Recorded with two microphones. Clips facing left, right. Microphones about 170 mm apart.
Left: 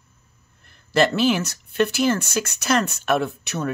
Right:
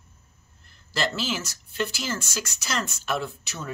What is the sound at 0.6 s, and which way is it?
Speech, 60° left (ahead or behind).